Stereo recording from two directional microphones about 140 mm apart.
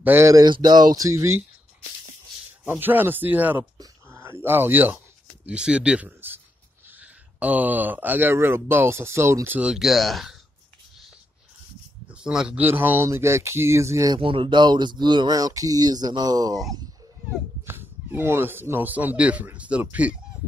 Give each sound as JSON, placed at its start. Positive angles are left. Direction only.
{"t": 0.0, "sound": "speech", "side_deg": -15}
{"t": 2.6, "sound": "speech", "side_deg": -10}
{"t": 12.1, "sound": "speech", "side_deg": -5}
{"t": 14.2, "sound": "speech", "side_deg": -40}
{"t": 17.6, "sound": "speech", "side_deg": -15}